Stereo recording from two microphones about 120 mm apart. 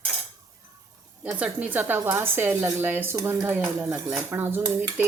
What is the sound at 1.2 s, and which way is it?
A woman's voice, 10° right (ahead or behind).